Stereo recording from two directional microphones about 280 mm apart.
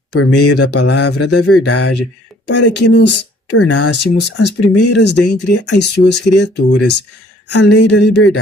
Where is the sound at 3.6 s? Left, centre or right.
Left.